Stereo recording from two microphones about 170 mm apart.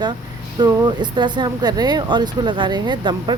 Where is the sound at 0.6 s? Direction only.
25° right (ahead or behind).